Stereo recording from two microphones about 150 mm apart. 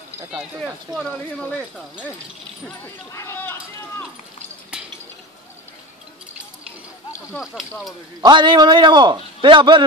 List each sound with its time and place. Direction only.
0.9 s speech: centre (ahead or behind)
2.8 s speech: 15° left (ahead or behind)
8.2 s a man's voice: 30° right (ahead or behind)